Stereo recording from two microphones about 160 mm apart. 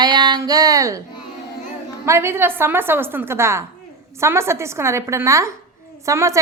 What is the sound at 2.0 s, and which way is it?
A woman's voice, 15° right (ahead or behind).